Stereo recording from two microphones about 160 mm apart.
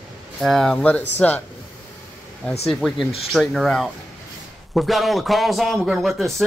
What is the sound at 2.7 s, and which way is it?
Speech, centre (ahead or behind).